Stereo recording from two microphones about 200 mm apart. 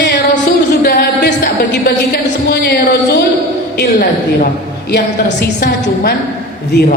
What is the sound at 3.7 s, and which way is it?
A woman's voice, 50° left (ahead or behind).